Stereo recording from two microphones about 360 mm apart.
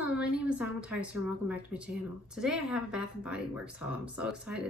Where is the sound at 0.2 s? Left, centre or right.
Centre.